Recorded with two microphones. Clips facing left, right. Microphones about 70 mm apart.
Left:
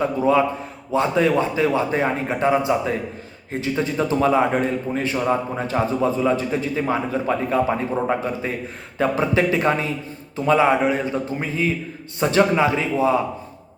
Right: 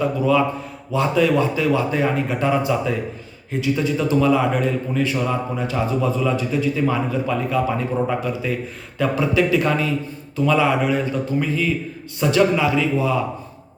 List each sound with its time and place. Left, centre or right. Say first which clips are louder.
0.0 s a man's voice: even; left